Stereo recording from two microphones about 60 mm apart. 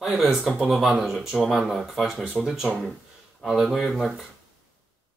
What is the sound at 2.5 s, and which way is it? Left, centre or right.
Speech, centre.